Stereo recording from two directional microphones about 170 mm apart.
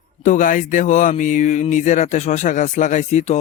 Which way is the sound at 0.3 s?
50° left (ahead or behind).